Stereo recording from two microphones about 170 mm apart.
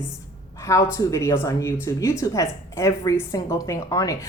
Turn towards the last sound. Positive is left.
turn(degrees=20)  # may be behind; listen again after turning